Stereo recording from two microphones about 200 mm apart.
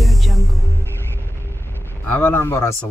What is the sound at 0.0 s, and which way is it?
Music, centre (ahead or behind).